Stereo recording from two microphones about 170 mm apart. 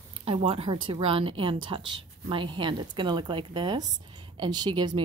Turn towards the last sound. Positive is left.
turn(degrees=-25)  # may be behind; listen again after turning